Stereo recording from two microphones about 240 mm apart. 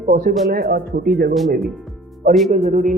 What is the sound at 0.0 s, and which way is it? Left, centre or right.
Speech, right.